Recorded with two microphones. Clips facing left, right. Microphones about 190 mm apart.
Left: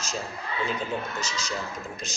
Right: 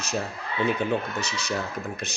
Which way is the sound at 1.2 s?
60° right (ahead or behind).